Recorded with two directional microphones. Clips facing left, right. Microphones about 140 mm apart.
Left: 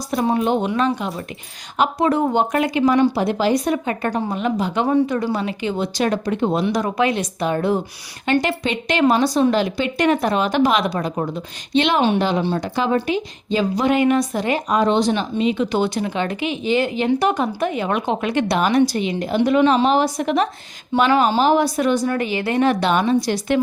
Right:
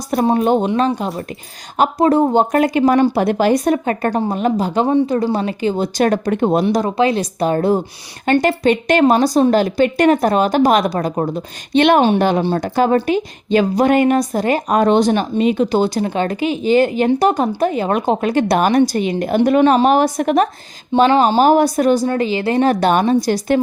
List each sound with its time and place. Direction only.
0.3 s a woman's voice: 40° right (ahead or behind)
11.7 s a woman's voice: 55° right (ahead or behind)
12.4 s a woman's voice: 35° right (ahead or behind)
12.6 s a woman's voice: 50° right (ahead or behind)
21.0 s a woman's voice: 35° right (ahead or behind)